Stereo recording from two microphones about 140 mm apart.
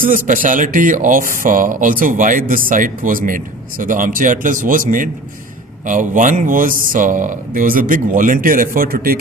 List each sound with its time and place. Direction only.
0.0 s speech: 75° right (ahead or behind)